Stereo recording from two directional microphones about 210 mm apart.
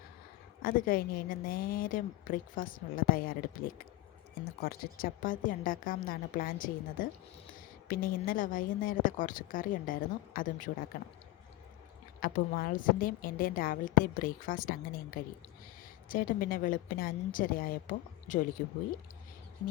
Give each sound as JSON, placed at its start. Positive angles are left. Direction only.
{"t": 0.6, "sound": "a woman's voice", "side_deg": 45}
{"t": 12.2, "sound": "a woman's voice", "side_deg": 45}